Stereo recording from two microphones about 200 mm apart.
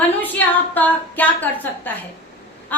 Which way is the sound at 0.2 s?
10° left (ahead or behind).